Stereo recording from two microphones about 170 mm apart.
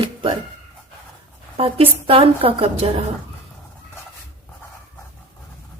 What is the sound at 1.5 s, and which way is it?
Speech, 35° right (ahead or behind).